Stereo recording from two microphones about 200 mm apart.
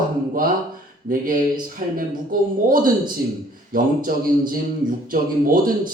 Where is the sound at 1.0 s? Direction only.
45° right (ahead or behind).